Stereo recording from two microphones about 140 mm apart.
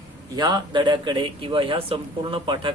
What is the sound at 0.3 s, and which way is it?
Speech, 30° right (ahead or behind).